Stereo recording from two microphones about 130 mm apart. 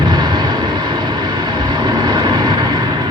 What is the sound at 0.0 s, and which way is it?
Vehicle, 35° right (ahead or behind).